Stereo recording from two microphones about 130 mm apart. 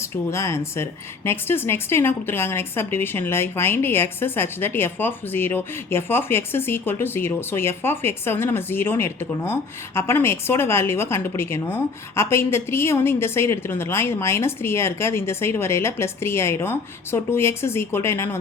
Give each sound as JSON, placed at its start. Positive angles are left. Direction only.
{"t": 0.3, "sound": "a woman's voice", "side_deg": 20}